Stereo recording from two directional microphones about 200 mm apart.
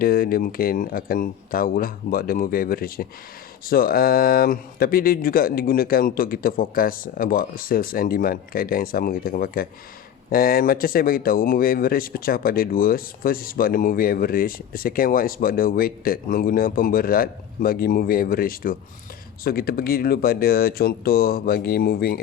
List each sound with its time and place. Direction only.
0.0 s speech: 45° left (ahead or behind)